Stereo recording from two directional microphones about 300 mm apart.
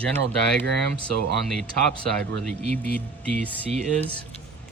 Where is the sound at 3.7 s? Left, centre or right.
Right.